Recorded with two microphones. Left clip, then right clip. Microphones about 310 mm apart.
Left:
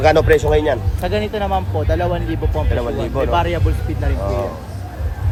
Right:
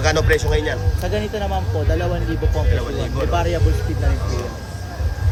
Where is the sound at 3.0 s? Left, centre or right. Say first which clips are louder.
Left 4 dB; centre.